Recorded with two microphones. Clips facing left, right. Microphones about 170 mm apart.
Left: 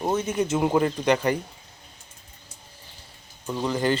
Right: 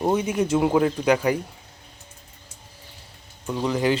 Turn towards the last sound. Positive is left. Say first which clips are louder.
# right 2 dB
turn(degrees=0)  # may be behind; listen again after turning